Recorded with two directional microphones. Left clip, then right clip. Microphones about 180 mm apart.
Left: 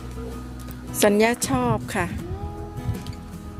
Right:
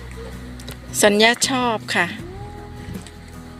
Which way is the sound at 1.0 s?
5° left (ahead or behind).